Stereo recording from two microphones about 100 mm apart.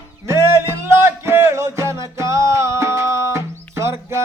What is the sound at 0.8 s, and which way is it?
Music, 25° right (ahead or behind).